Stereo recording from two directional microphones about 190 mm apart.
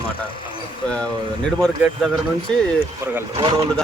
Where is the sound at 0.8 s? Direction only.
5° left (ahead or behind).